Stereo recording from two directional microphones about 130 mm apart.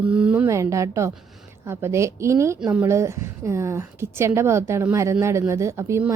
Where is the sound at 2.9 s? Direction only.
20° right (ahead or behind).